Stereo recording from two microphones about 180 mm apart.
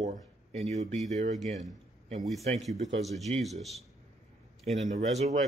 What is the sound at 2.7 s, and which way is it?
Speech, 40° right (ahead or behind).